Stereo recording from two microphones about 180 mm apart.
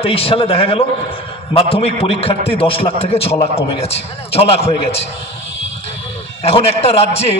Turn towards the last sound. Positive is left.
turn(degrees=35)  # may be behind; listen again after turning